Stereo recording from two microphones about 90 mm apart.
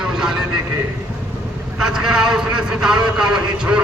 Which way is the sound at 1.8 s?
5° right (ahead or behind).